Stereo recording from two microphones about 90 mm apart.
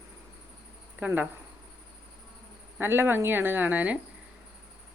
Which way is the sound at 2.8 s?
25° right (ahead or behind).